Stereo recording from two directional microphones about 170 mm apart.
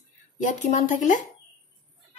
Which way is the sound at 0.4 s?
45° left (ahead or behind).